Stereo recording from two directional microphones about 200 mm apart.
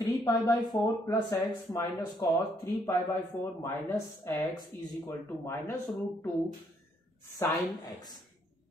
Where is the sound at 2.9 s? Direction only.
15° left (ahead or behind).